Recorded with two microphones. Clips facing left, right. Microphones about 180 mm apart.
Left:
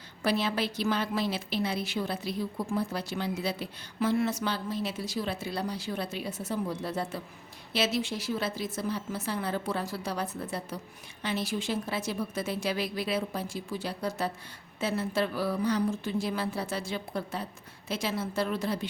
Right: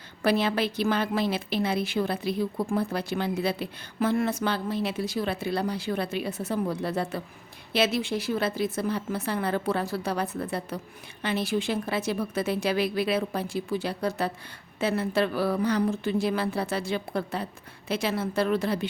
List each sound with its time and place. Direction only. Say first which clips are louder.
0.2 s a woman's voice: right 4 dB; 60° right (ahead or behind)